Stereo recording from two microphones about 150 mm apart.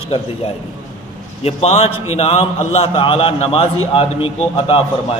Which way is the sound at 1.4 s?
45° left (ahead or behind).